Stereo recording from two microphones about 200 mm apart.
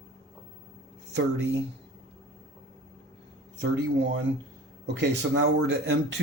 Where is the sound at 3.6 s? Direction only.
60° right (ahead or behind).